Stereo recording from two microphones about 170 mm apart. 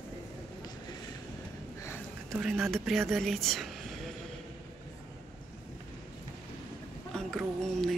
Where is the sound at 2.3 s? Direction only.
5° right (ahead or behind).